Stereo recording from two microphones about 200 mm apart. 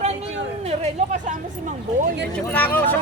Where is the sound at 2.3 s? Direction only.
10° left (ahead or behind).